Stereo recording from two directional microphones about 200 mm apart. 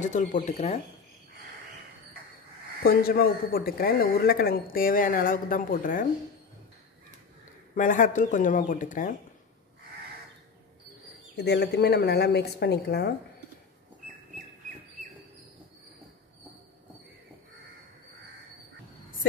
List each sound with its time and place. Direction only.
0.0 s speech: 40° left (ahead or behind)
2.8 s a man's voice: 50° left (ahead or behind)
7.7 s speech: 40° left (ahead or behind)
11.3 s speech: 55° left (ahead or behind)